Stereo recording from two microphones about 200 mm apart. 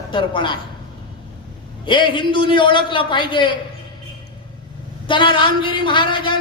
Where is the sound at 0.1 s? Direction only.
25° left (ahead or behind).